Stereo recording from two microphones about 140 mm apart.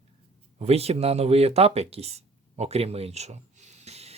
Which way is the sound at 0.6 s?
45° right (ahead or behind).